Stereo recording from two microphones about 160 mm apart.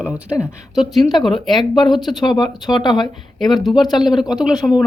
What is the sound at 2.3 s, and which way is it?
Speech, 25° left (ahead or behind).